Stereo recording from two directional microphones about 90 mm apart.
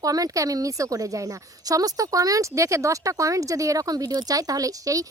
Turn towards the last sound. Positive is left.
turn(degrees=-40)  # may be behind; listen again after turning